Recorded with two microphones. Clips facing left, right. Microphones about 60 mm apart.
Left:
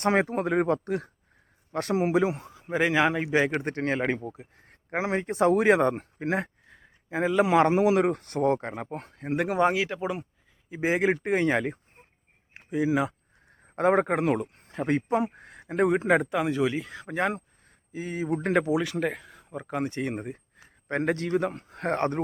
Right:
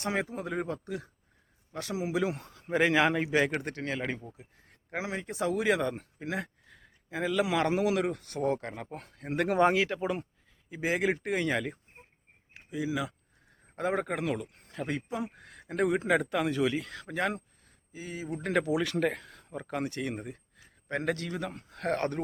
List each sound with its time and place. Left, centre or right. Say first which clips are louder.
0.0 s speech: left 8 dB; left
2.3 s speech: left 1 dB; centre
3.6 s speech: left 7 dB; left
6.7 s speech: left 6 dB; left
9.2 s speech: left 3 dB; centre
9.5 s speech: even; centre
10.8 s speech: left 4 dB; left
12.5 s speech: left 7 dB; left
15.7 s speech: left 4 dB; left
16.3 s speech: left 3 dB; centre
17.7 s speech: left 7 dB; left
18.4 s speech: left 3 dB; left
18.8 s speech: left 1 dB; centre
19.9 s speech: left 4 dB; left